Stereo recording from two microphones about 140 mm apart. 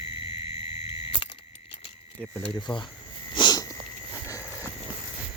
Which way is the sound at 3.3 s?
30° left (ahead or behind).